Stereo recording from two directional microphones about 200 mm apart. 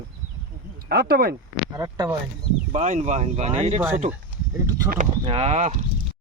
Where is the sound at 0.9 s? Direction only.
50° right (ahead or behind).